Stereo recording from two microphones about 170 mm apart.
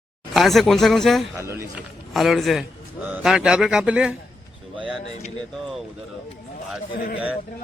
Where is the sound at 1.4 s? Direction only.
15° right (ahead or behind).